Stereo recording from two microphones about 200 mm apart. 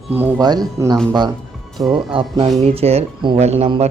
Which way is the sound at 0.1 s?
10° right (ahead or behind).